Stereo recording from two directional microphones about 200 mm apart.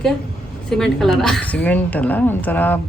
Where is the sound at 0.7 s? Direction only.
5° left (ahead or behind).